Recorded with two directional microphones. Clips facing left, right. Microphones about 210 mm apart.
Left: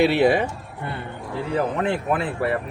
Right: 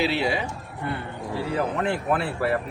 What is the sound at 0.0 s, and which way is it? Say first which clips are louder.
Speech: left 7 dB; 55° left (ahead or behind).